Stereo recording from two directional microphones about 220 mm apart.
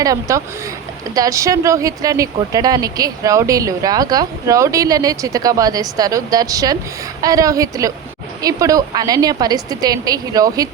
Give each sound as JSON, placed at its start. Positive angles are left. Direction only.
{"t": 0.0, "sound": "speech", "side_deg": -15}